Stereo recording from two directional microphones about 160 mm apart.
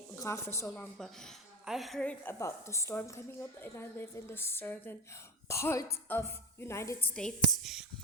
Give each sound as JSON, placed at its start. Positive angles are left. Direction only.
{"t": 0.2, "sound": "a woman's voice", "side_deg": 20}
{"t": 0.9, "sound": "a woman's voice", "side_deg": 0}
{"t": 7.2, "sound": "a woman's voice", "side_deg": 0}